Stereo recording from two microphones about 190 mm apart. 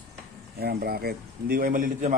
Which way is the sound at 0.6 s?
55° right (ahead or behind).